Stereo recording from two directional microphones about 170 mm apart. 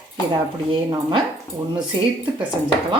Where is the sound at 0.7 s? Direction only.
30° right (ahead or behind).